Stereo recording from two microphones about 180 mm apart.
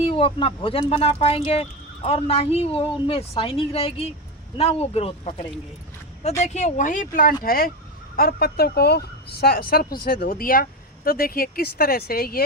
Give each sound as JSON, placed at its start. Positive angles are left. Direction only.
{"t": 0.0, "sound": "a woman's voice", "side_deg": 30}